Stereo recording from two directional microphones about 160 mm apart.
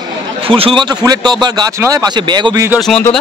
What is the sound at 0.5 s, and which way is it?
Speech, 35° right (ahead or behind).